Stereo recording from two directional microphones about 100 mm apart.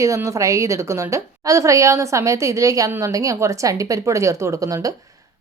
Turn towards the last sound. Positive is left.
turn(degrees=-35)  # may be behind; listen again after turning